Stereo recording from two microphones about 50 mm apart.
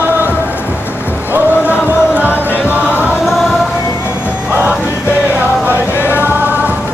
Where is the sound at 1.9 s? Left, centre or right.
Right.